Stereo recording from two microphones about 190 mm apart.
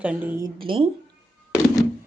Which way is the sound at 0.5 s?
25° right (ahead or behind).